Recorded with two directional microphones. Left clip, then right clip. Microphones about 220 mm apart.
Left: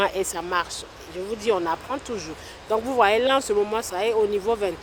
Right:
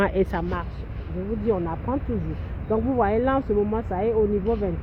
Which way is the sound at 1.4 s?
40° left (ahead or behind).